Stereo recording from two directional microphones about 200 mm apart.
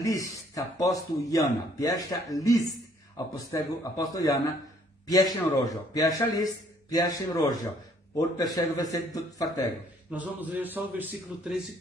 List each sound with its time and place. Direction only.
0.0 s speech: 15° left (ahead or behind)
10.1 s a man's voice: 5° right (ahead or behind)